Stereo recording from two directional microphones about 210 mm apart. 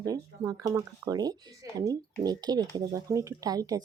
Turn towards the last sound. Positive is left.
turn(degrees=-15)  # may be behind; listen again after turning